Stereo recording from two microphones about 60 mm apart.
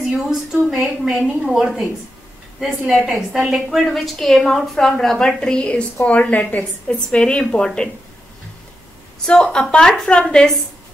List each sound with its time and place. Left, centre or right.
0.0 s a woman's voice: centre
3.1 s a woman's voice: centre
3.8 s a woman's voice: centre
9.2 s a woman's voice: centre